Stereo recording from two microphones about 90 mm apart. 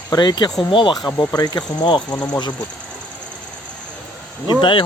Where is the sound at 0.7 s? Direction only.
60° left (ahead or behind).